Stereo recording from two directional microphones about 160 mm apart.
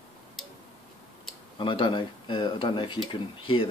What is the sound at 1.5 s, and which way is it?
Speech, 30° left (ahead or behind).